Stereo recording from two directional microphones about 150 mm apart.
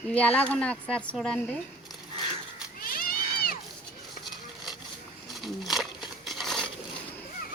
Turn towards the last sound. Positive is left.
turn(degrees=0)  # may be behind; listen again after turning